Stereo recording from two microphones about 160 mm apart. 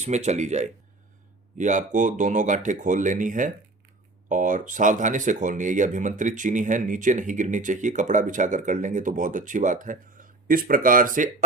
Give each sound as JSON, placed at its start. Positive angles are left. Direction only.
{"t": 0.0, "sound": "speech", "side_deg": -45}